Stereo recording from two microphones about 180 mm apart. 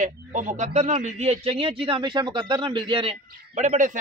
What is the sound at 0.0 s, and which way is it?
A man's voice, 45° right (ahead or behind).